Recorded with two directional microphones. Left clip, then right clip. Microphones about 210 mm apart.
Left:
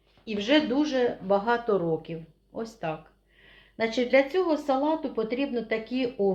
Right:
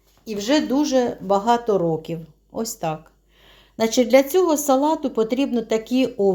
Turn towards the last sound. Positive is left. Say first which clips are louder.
# right 7 dB
turn(degrees=-40)  # may be behind; listen again after turning